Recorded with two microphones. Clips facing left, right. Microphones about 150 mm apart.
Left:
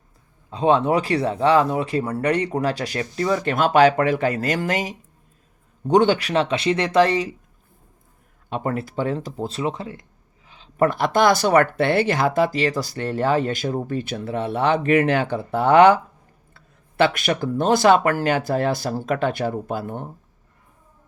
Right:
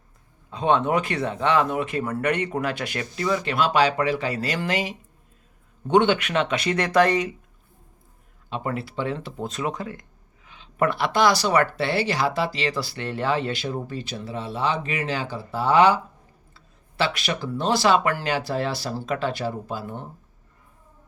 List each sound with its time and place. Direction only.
0.5 s speech: 35° left (ahead or behind)
8.4 s speech: 45° left (ahead or behind)